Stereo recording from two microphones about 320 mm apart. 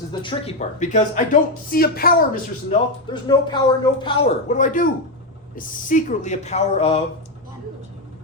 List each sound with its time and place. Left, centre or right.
0.1 s speech: centre
3.1 s speech: centre